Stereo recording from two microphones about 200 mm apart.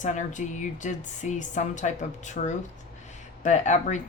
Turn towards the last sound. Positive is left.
turn(degrees=35)  # may be behind; listen again after turning